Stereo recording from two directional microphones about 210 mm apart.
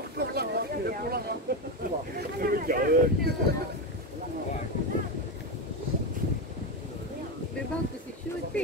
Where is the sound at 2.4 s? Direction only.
45° right (ahead or behind).